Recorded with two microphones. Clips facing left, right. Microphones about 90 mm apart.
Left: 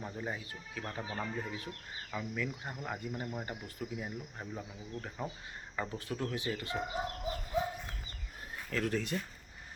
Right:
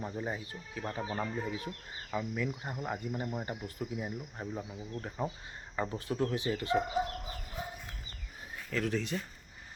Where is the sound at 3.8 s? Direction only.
25° right (ahead or behind).